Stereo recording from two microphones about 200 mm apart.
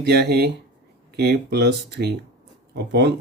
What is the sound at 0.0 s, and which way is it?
Speech, 55° right (ahead or behind).